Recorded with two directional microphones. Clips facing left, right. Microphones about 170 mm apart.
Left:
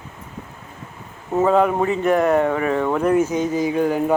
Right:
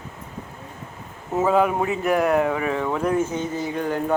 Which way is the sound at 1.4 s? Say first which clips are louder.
Left 3 dB; 5° right (ahead or behind).